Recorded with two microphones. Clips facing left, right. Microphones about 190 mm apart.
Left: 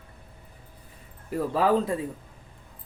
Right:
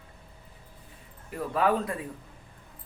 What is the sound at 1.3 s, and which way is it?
Speech, 30° left (ahead or behind).